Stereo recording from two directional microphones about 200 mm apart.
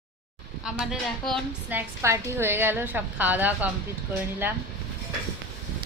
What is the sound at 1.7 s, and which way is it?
A woman's voice, 15° right (ahead or behind).